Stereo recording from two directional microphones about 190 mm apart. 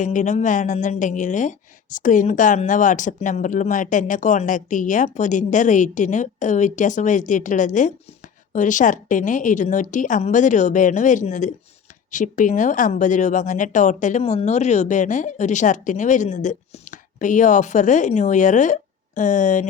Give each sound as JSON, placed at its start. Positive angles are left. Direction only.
{"t": 0.0, "sound": "speech", "side_deg": 40}